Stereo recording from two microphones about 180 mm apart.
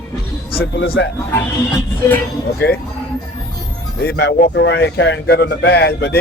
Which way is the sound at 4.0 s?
65° left (ahead or behind).